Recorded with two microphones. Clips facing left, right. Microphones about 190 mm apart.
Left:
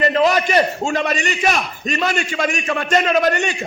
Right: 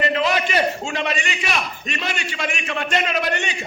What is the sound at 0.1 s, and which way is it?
A man's voice, 45° left (ahead or behind).